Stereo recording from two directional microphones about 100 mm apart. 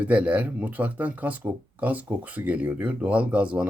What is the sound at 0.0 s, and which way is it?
Speech, 15° right (ahead or behind).